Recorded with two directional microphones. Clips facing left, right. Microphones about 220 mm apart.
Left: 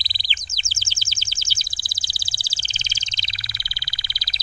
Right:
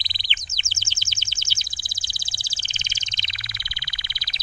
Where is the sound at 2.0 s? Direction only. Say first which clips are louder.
Left 1 dB; 35° left (ahead or behind).